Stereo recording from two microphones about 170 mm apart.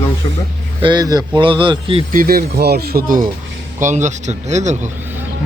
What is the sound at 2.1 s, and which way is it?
Speech, 60° right (ahead or behind).